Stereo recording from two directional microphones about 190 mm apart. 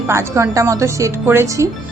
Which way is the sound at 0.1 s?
15° right (ahead or behind).